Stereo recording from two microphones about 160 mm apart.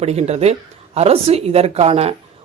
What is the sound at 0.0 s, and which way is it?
Speech, 40° right (ahead or behind).